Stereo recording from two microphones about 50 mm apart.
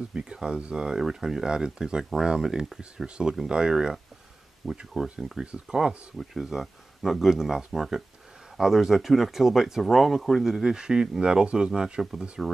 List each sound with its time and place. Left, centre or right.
0.1 s speech: centre
6.1 s speech: centre